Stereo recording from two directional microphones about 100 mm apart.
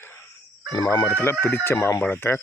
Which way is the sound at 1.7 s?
30° left (ahead or behind).